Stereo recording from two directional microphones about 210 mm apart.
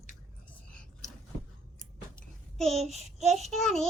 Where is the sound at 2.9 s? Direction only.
30° right (ahead or behind).